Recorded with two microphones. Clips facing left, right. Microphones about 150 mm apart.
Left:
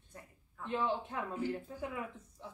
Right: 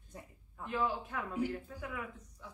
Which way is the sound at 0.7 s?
25° left (ahead or behind).